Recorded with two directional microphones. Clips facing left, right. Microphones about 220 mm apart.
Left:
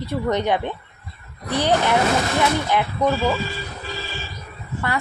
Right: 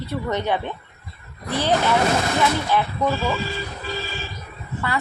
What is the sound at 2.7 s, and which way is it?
Speech, 15° left (ahead or behind).